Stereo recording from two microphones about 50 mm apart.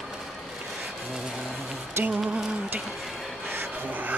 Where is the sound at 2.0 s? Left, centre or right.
Right.